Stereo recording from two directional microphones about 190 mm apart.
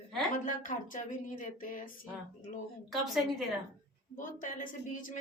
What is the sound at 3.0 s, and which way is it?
Speech, centre (ahead or behind).